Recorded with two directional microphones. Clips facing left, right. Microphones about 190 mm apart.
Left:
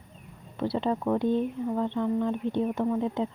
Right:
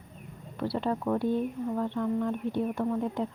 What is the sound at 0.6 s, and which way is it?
Speech, 20° left (ahead or behind).